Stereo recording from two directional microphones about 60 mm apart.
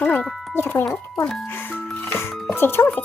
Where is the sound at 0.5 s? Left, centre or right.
Left.